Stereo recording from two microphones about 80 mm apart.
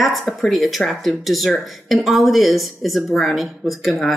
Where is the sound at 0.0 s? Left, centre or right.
Centre.